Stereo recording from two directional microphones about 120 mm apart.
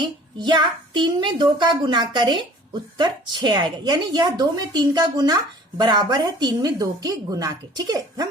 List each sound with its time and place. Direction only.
0.0 s a woman's voice: 40° right (ahead or behind)